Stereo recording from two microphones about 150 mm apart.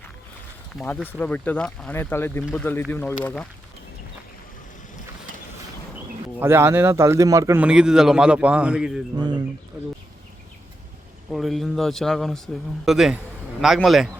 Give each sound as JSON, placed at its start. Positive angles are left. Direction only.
{"t": 1.2, "sound": "speech", "side_deg": 10}
{"t": 6.4, "sound": "a man's voice", "side_deg": -15}
{"t": 7.6, "sound": "a man's voice", "side_deg": -5}
{"t": 9.1, "sound": "speech", "side_deg": -30}
{"t": 11.3, "sound": "a man's voice", "side_deg": 0}